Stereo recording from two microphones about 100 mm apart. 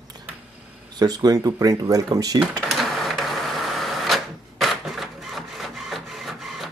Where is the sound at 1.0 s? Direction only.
40° right (ahead or behind).